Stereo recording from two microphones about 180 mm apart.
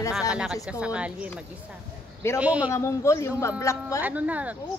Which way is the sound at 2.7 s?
15° left (ahead or behind).